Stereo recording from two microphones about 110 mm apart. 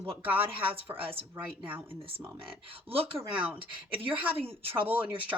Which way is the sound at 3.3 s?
10° right (ahead or behind).